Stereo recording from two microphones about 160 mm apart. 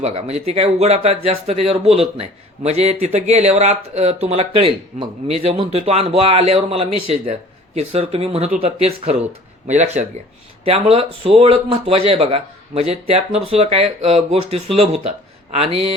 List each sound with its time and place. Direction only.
0.0 s speech: 40° right (ahead or behind)
9.6 s speech: 45° right (ahead or behind)